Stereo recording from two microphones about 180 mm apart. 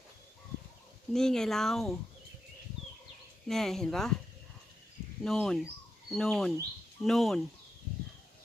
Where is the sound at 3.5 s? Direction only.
Centre (ahead or behind).